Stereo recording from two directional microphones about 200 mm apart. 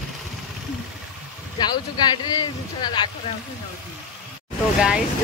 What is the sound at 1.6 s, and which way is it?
Speech, 20° left (ahead or behind).